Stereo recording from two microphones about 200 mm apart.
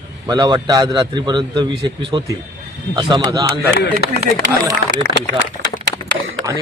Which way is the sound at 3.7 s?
55° left (ahead or behind).